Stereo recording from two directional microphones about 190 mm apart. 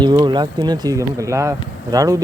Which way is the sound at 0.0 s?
25° right (ahead or behind).